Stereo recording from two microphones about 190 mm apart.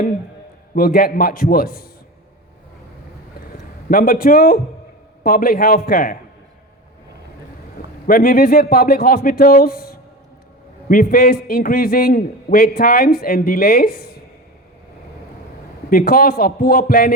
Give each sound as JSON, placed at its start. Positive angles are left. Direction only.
{"t": 0.8, "sound": "a man's voice", "side_deg": 50}
{"t": 3.4, "sound": "a sound", "side_deg": 50}
{"t": 5.2, "sound": "a man's voice", "side_deg": 50}
{"t": 8.0, "sound": "a man's voice", "side_deg": 50}
{"t": 15.9, "sound": "a man's voice", "side_deg": 50}